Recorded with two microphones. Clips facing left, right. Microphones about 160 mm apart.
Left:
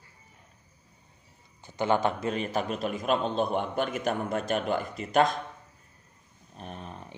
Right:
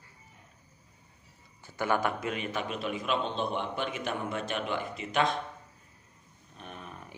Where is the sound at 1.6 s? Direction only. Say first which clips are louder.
Left 3 dB; 20° left (ahead or behind); by 5.3 s 40° left (ahead or behind).